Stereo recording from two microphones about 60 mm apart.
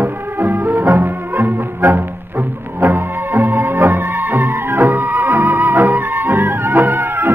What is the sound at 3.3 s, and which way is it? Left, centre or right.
Music, right.